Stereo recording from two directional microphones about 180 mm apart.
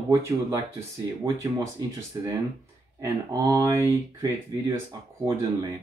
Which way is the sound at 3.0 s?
20° right (ahead or behind).